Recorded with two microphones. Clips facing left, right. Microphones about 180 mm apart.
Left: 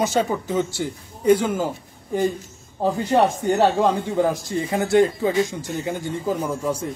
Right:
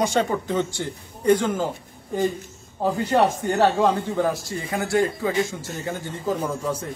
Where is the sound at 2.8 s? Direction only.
10° left (ahead or behind).